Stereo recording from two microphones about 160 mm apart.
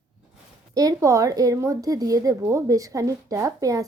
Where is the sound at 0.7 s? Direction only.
20° right (ahead or behind).